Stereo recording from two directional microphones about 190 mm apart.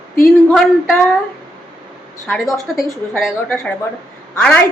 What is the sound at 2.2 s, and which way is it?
A woman's voice, centre (ahead or behind).